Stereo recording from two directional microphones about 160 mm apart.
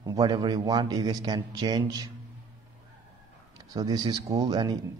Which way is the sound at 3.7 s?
25° right (ahead or behind).